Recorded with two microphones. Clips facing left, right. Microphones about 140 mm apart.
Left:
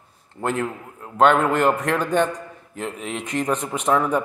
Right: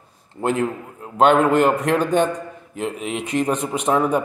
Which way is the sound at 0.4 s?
20° right (ahead or behind).